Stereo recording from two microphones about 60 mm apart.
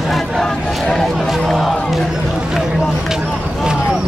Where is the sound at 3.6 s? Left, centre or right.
Centre.